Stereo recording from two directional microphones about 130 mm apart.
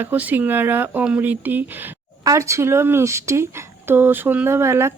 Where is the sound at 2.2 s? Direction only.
25° right (ahead or behind).